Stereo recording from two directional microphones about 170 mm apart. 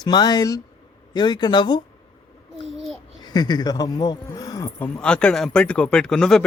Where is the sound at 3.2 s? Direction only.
25° left (ahead or behind).